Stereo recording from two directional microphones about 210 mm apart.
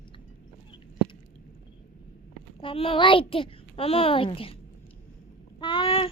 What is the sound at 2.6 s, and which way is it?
A child's voice, 25° left (ahead or behind).